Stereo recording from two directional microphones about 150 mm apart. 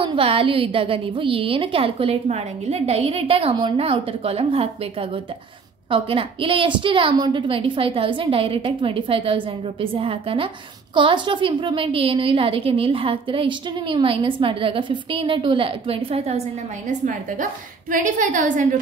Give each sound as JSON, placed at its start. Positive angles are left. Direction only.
{"t": 0.0, "sound": "a woman's voice", "side_deg": -35}
{"t": 5.9, "sound": "a woman's voice", "side_deg": -35}